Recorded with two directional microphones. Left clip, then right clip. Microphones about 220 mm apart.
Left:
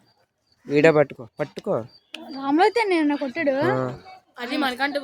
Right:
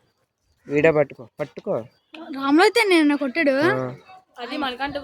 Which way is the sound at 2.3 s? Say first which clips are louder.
Right 2 dB; 50° right (ahead or behind).